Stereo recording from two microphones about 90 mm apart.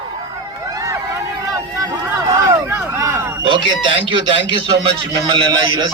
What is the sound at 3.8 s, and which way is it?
Speech, 65° right (ahead or behind).